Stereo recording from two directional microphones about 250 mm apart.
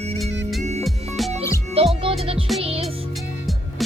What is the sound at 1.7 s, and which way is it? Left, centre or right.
Music, right.